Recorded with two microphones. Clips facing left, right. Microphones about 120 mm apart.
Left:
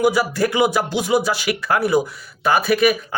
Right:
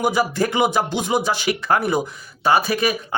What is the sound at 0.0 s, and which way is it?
A man's voice, 20° right (ahead or behind).